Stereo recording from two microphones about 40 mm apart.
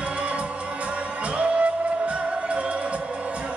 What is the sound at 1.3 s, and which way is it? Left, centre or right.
Music, right.